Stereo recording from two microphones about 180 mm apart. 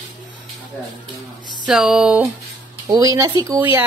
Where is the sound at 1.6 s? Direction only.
5° right (ahead or behind).